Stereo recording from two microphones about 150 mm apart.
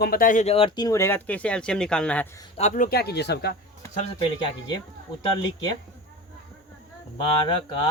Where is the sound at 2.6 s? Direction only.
55° left (ahead or behind).